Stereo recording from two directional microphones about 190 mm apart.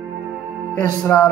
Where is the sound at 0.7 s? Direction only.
10° left (ahead or behind).